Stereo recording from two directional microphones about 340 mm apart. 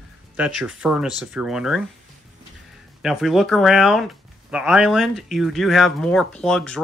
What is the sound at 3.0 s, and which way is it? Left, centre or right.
Speech, centre.